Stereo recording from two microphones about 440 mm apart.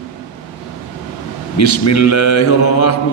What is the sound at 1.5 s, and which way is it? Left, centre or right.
A man's voice, left.